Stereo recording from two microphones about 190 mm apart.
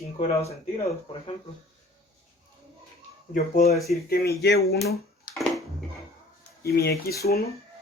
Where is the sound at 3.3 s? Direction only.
40° left (ahead or behind).